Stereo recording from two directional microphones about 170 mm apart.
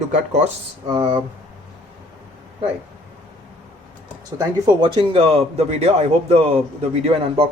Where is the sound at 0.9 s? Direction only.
25° right (ahead or behind).